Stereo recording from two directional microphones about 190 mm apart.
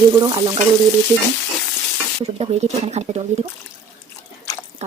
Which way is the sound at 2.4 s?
35° right (ahead or behind).